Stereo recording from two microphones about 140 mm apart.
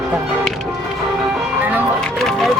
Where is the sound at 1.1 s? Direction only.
5° right (ahead or behind).